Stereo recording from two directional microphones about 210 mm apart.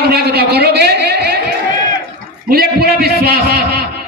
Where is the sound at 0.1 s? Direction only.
50° right (ahead or behind).